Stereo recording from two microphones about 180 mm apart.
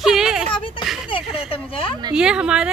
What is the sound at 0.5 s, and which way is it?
Speech, 30° left (ahead or behind).